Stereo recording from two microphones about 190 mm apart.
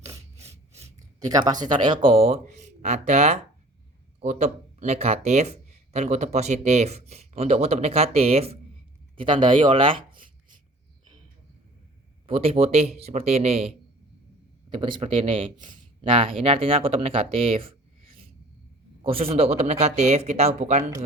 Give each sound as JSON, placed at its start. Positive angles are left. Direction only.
{"t": 0.4, "sound": "filing", "side_deg": -15}
{"t": 0.9, "sound": "a sound", "side_deg": -20}
{"t": 1.6, "sound": "speech", "side_deg": -25}
{"t": 12.2, "sound": "speech", "side_deg": -30}
{"t": 15.5, "sound": "speech", "side_deg": -40}
{"t": 16.0, "sound": "speech", "side_deg": -30}
{"t": 19.0, "sound": "speech", "side_deg": -30}